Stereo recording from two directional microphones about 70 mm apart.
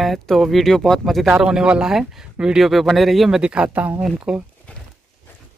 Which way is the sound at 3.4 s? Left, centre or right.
Centre.